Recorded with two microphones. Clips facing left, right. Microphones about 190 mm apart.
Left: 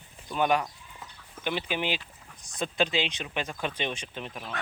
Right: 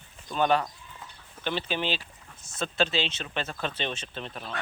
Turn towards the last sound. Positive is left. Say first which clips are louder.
# even
turn(degrees=10)  # may be behind; listen again after turning